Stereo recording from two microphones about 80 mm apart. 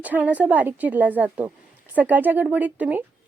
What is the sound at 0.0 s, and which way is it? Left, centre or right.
Speech, centre.